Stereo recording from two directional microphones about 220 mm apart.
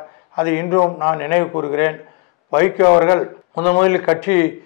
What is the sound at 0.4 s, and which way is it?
A man's voice, 15° left (ahead or behind).